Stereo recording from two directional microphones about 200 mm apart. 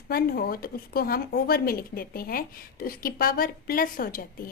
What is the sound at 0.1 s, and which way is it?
A woman's voice, 50° left (ahead or behind).